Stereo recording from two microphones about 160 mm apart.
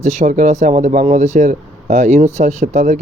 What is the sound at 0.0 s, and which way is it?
A man's voice, 50° right (ahead or behind).